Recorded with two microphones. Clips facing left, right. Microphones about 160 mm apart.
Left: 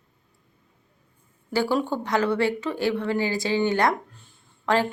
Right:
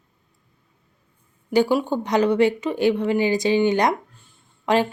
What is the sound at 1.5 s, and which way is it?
Speech, 15° right (ahead or behind).